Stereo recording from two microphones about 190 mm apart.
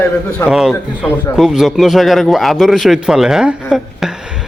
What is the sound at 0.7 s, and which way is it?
Speech, 10° left (ahead or behind).